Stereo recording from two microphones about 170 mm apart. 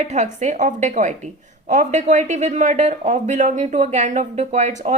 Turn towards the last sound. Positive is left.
turn(degrees=-45)  # may be behind; listen again after turning